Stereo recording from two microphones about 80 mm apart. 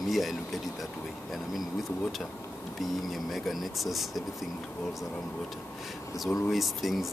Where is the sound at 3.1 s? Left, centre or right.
Centre.